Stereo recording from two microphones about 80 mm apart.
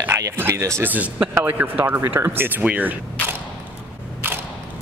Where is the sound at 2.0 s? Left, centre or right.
Right.